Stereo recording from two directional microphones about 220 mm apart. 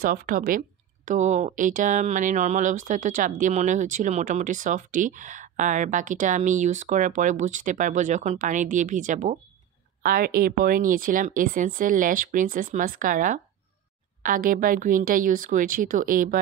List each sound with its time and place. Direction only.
0.0 s speech: 40° right (ahead or behind)